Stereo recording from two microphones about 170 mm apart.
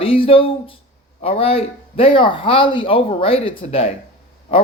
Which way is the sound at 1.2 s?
35° left (ahead or behind).